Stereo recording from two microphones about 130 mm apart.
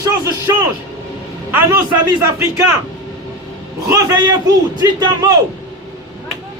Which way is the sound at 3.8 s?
30° right (ahead or behind).